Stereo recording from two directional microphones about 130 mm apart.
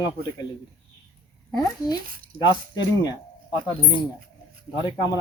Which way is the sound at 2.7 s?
30° left (ahead or behind).